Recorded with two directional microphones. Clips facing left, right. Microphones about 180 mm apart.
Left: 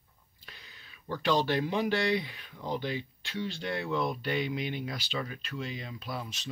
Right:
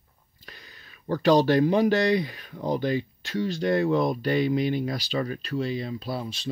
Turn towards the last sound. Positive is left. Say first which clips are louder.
# right 7 dB
turn(degrees=-30)  # may be behind; listen again after turning